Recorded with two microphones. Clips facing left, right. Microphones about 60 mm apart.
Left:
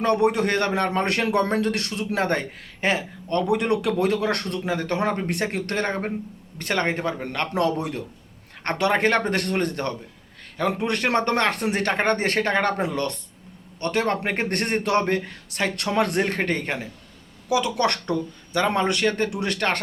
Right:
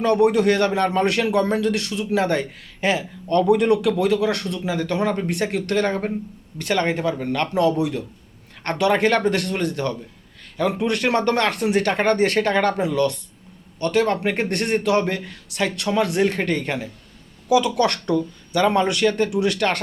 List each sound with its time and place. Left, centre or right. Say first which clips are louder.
0.0 s a man's voice: right 4 dB; left
8.6 s a man's voice: right 2 dB; left